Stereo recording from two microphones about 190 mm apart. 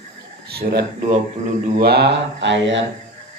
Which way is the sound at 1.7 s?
55° right (ahead or behind).